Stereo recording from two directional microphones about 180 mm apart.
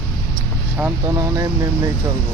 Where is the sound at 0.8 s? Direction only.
5° right (ahead or behind).